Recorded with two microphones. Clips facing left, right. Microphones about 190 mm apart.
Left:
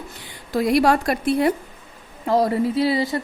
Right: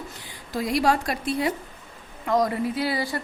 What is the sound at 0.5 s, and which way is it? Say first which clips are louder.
A woman's voice: left 5 dB; 65° left (ahead or behind).